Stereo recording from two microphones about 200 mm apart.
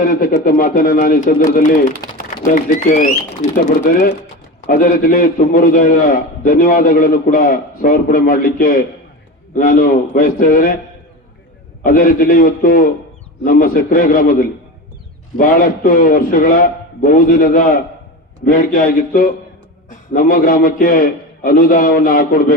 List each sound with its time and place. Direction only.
0.0 s a man's voice: 45° left (ahead or behind)
11.8 s a man's voice: 45° left (ahead or behind)
15.4 s a man's voice: 45° left (ahead or behind)